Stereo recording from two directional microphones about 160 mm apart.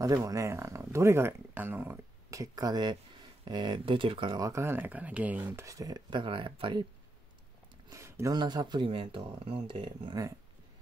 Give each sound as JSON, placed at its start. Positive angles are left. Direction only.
{"t": 0.0, "sound": "speech", "side_deg": -20}
{"t": 7.9, "sound": "speech", "side_deg": -15}